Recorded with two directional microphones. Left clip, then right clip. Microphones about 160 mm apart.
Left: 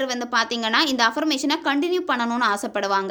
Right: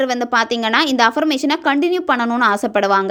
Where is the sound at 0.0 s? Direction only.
35° right (ahead or behind).